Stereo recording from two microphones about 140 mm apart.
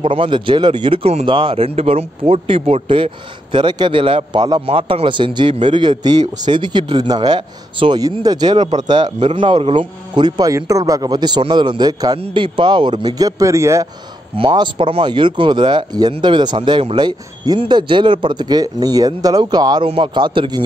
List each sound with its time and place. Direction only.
0.0 s speech: 40° right (ahead or behind); by 13.8 s 20° right (ahead or behind)
14.3 s speech: 40° right (ahead or behind)